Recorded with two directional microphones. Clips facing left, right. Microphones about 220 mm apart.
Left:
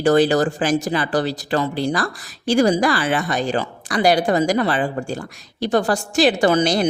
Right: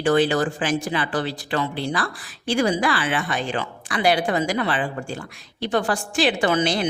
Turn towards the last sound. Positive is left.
turn(degrees=40)  # may be behind; listen again after turning